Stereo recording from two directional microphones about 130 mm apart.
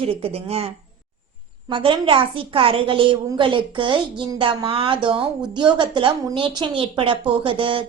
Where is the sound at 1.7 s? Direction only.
40° right (ahead or behind).